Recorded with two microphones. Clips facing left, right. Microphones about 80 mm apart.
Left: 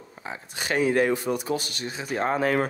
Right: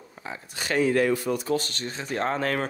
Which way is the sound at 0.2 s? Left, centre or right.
Left.